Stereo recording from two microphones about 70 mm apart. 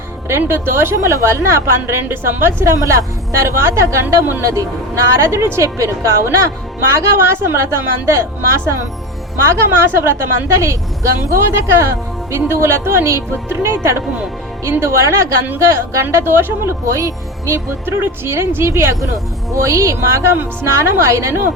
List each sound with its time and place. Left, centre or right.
0.3 s a woman's voice: right
17.8 s a woman's voice: right